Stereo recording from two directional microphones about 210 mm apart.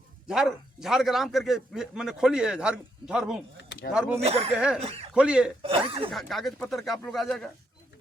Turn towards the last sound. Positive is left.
turn(degrees=0)  # may be behind; listen again after turning